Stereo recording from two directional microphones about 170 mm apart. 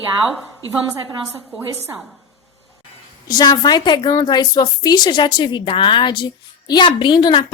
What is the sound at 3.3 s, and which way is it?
A woman's voice, 25° left (ahead or behind).